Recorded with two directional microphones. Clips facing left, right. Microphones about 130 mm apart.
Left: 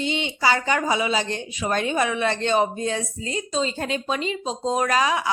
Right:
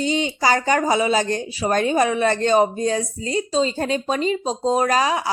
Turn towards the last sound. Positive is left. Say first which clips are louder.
# right 2 dB
turn(degrees=-35)  # may be behind; listen again after turning